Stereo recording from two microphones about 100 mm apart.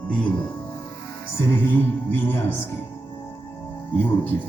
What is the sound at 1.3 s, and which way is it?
Speech, 25° left (ahead or behind).